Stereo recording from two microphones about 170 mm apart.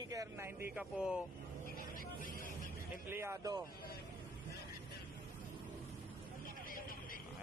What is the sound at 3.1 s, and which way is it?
Speech, 15° right (ahead or behind).